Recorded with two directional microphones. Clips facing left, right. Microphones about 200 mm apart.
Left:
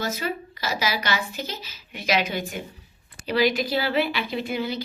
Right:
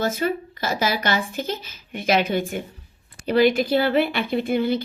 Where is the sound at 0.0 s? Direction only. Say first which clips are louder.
Right 5 dB; 50° right (ahead or behind).